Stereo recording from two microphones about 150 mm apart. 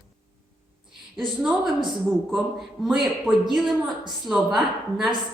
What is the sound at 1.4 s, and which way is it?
A man's voice, 5° right (ahead or behind).